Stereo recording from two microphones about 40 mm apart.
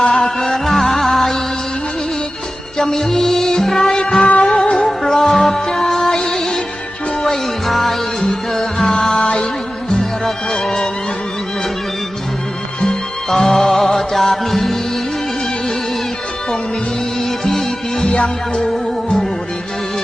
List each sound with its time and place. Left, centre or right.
0.1 s music: centre
2.7 s music: centre
4.9 s music: centre
8.2 s music: centre
12.8 s music: centre
17.2 s music: centre